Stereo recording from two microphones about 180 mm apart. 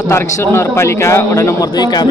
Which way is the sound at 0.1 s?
15° left (ahead or behind).